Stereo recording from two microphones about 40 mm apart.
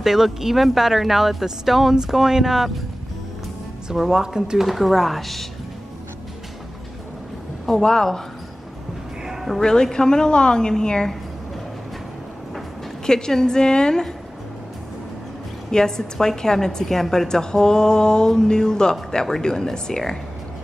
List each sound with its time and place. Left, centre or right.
0.0 s a woman's voice: centre
3.9 s a woman's voice: centre
4.6 s speech: centre
7.7 s a woman's voice: centre
9.2 s a sound: centre
9.6 s a woman's voice: centre
13.0 s a woman's voice: centre
15.7 s a woman's voice: centre